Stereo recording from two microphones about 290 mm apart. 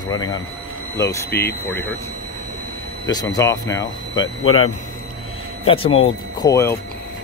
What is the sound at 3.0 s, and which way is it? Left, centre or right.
Speech, centre.